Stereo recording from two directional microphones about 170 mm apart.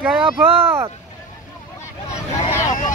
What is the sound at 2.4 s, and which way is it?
Vehicle, 50° left (ahead or behind).